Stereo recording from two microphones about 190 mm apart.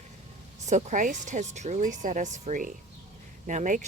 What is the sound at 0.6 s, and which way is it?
Speech, 40° right (ahead or behind).